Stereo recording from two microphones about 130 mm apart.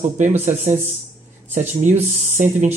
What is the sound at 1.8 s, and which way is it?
Speech, 65° right (ahead or behind).